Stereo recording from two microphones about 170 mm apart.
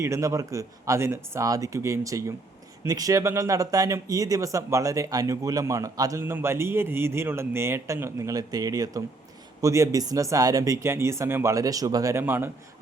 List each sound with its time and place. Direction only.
0.0 s speech: 15° right (ahead or behind)